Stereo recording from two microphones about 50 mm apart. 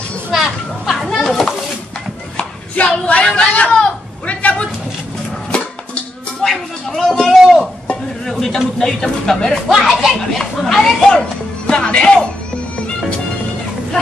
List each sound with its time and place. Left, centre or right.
0.3 s children playing: centre
2.3 s a sound: left
3.3 s speech: left
4.3 s a sound: left
5.5 s music: centre
6.4 s a sound: centre
8.3 s a man's voice: centre
9.7 s speech: centre
11.1 s speech: centre